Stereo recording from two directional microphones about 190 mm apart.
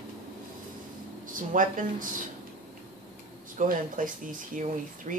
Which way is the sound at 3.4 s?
45° right (ahead or behind).